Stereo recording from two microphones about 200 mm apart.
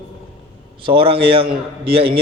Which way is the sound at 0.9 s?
25° right (ahead or behind).